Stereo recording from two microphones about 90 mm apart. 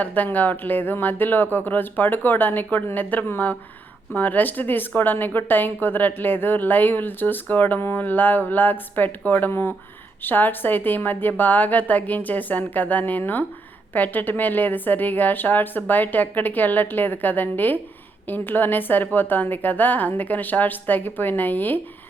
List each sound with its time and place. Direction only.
0.0 s speech: 20° left (ahead or behind)